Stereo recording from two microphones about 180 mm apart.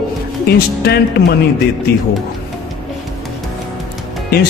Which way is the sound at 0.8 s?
60° left (ahead or behind).